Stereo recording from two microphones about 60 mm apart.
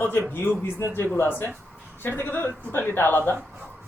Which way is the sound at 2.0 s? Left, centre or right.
Left.